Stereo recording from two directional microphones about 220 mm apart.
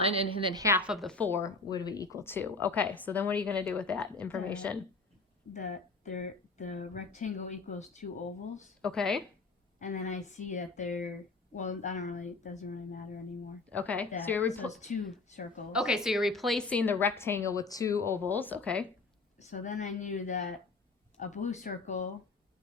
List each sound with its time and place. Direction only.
0.0 s a woman's voice: 25° right (ahead or behind); by 4.8 s 5° left (ahead or behind)
5.5 s speech: 35° left (ahead or behind)
8.8 s a woman's voice: 5° left (ahead or behind)
9.7 s speech: 35° left (ahead or behind)
13.7 s a woman's voice: 5° left (ahead or behind)
14.7 s speech: 30° left (ahead or behind)
15.7 s a woman's voice: centre (ahead or behind)
19.4 s speech: 35° left (ahead or behind)